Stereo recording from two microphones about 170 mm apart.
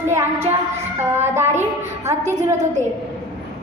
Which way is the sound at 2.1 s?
45° right (ahead or behind).